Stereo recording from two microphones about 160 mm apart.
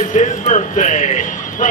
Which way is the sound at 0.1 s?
45° left (ahead or behind).